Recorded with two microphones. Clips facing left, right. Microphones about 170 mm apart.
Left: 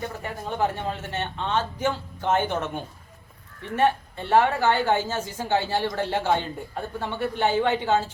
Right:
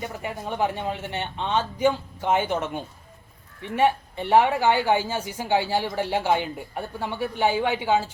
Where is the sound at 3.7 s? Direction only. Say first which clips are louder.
Right 1 dB; 15° right (ahead or behind).